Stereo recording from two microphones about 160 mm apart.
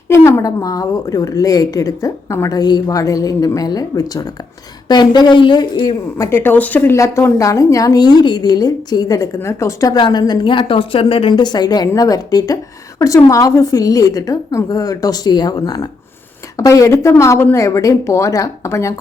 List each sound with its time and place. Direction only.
0.1 s a woman's voice: 20° left (ahead or behind)
6.3 s a woman's voice: 10° left (ahead or behind)